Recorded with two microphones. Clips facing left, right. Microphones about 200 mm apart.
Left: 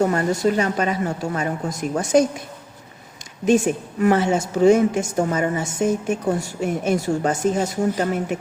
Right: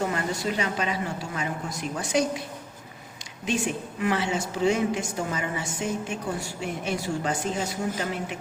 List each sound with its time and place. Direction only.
0.0 s a woman's voice: 45° left (ahead or behind)
3.4 s a woman's voice: 45° left (ahead or behind)